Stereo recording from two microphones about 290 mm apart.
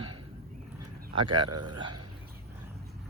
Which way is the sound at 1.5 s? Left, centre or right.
Right.